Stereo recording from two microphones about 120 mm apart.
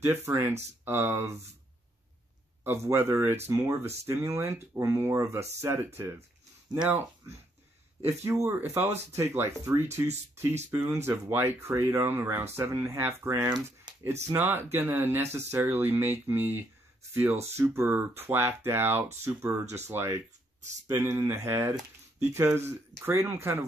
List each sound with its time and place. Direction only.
0.0 s speech: 20° right (ahead or behind)
2.6 s speech: 20° right (ahead or behind)